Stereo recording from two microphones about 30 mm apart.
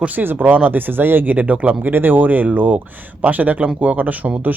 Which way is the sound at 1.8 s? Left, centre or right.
Right.